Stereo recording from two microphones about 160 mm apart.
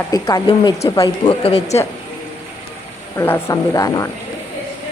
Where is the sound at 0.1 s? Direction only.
25° left (ahead or behind); by 1.8 s 40° left (ahead or behind).